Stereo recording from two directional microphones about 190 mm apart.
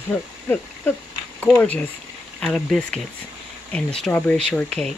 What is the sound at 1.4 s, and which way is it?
Speech, 10° left (ahead or behind).